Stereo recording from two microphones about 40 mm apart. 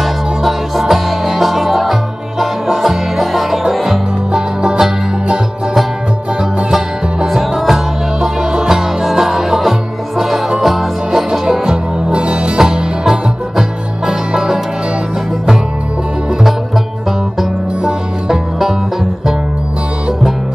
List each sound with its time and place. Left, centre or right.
0.0 s music: centre
4.3 s music: centre
4.8 s music: centre
7.2 s music: centre
11.6 s music: right
18.3 s music: centre